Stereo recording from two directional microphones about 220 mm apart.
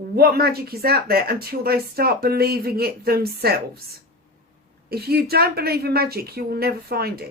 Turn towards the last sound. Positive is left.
turn(degrees=-45)  # may be behind; listen again after turning